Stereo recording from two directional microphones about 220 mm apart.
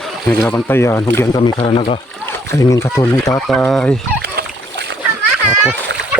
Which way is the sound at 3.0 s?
20° left (ahead or behind).